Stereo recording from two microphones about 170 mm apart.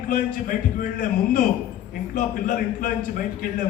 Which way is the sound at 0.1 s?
55° left (ahead or behind).